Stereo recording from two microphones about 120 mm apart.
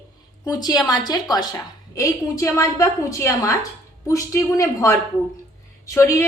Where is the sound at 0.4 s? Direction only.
35° left (ahead or behind).